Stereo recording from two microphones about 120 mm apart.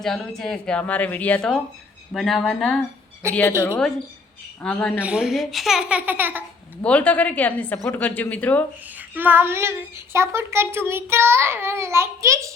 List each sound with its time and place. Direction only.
0.0 s a woman's voice: 5° left (ahead or behind)
3.2 s a child's voice: 20° right (ahead or behind)
4.6 s speech: 5° left (ahead or behind)
4.9 s speech: 10° right (ahead or behind)
6.8 s speech: 10° left (ahead or behind)
9.0 s a child's voice: 15° right (ahead or behind)